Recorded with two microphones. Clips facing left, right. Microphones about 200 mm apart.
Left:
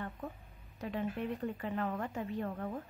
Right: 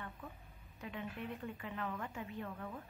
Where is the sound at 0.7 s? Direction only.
40° left (ahead or behind).